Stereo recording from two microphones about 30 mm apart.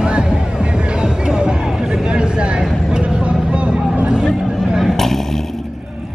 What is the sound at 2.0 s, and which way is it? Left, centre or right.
Vehicle, right.